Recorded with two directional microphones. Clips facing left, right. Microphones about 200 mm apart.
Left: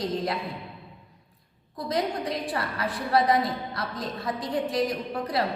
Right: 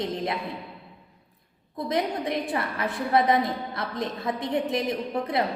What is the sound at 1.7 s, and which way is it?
A woman's voice, 20° right (ahead or behind).